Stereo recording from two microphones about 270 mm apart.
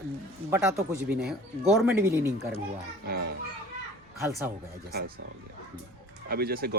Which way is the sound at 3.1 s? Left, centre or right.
Right.